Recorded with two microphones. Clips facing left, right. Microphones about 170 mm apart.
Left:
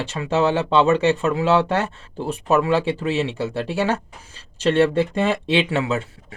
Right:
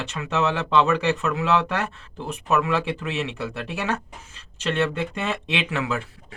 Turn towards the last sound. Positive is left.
turn(degrees=25)  # may be behind; listen again after turning